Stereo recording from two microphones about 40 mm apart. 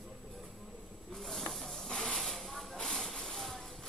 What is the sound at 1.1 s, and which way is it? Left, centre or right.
Snake, centre.